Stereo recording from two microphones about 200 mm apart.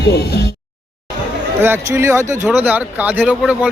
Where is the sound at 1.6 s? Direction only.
10° right (ahead or behind).